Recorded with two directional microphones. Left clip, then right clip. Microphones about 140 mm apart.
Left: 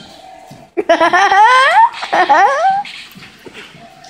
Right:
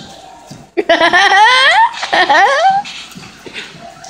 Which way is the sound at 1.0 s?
20° left (ahead or behind).